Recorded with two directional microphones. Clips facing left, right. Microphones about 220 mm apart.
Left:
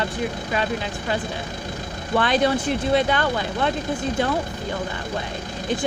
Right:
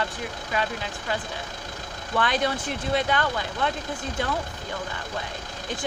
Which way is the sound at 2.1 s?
30° left (ahead or behind).